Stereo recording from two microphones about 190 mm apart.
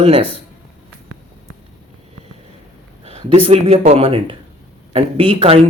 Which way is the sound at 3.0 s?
30° right (ahead or behind).